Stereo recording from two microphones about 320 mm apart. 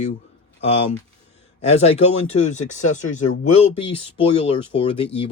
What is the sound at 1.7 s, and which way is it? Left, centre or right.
Speech, centre.